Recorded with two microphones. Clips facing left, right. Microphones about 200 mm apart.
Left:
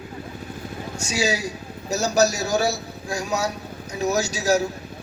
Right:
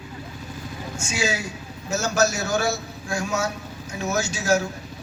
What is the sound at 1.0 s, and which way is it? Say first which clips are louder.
A man's voice: left 3 dB; 40° left (ahead or behind).